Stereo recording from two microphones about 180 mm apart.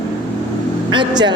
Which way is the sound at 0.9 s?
25° right (ahead or behind).